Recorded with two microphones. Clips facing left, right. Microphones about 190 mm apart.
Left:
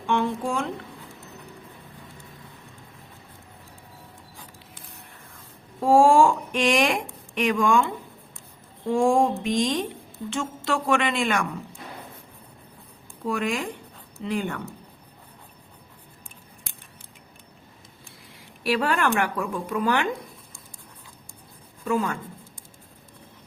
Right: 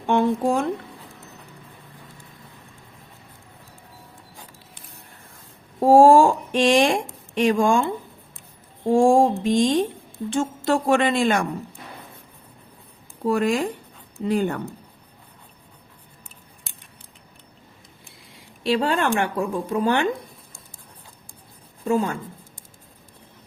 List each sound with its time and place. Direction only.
0.1 s a woman's voice: 40° right (ahead or behind)
5.8 s a woman's voice: 35° right (ahead or behind)
13.2 s a woman's voice: 40° right (ahead or behind)
18.3 s speech: 25° right (ahead or behind)
21.8 s speech: 30° right (ahead or behind)